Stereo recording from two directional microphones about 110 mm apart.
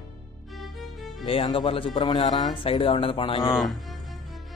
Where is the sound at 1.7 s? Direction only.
50° left (ahead or behind).